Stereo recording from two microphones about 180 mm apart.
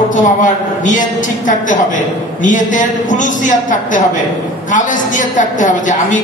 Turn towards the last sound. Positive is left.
turn(degrees=45)  # may be behind; listen again after turning